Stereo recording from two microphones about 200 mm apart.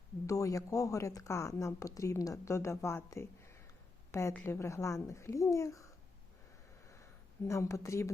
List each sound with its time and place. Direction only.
0.3 s speech: 15° left (ahead or behind)
7.4 s speech: 15° left (ahead or behind)